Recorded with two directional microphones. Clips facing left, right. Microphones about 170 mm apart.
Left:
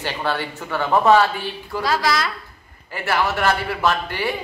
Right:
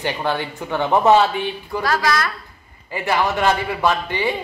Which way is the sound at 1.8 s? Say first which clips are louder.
Right 1 dB; 15° left (ahead or behind).